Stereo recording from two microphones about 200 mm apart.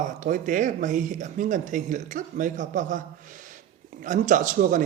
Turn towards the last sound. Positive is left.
turn(degrees=-40)  # may be behind; listen again after turning